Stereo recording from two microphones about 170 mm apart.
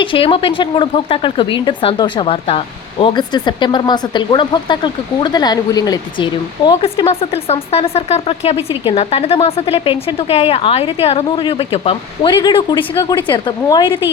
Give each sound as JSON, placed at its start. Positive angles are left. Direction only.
{"t": 0.0, "sound": "speech", "side_deg": 30}
{"t": 6.7, "sound": "speech", "side_deg": 30}